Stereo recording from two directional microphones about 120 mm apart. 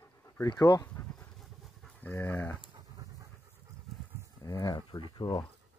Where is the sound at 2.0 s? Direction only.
15° left (ahead or behind).